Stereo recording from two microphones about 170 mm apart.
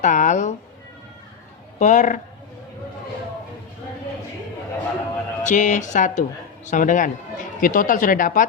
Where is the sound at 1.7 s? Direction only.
45° left (ahead or behind).